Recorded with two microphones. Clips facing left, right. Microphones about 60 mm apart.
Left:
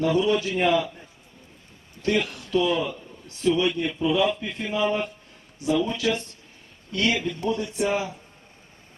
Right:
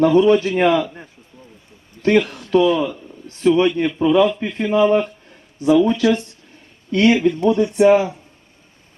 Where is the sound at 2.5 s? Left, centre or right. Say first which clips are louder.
Right 6 dB; right.